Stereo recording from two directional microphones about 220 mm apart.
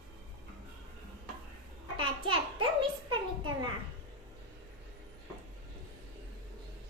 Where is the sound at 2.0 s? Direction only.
20° right (ahead or behind).